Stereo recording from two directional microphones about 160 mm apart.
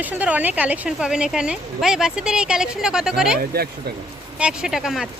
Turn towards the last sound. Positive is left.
turn(degrees=0)  # may be behind; listen again after turning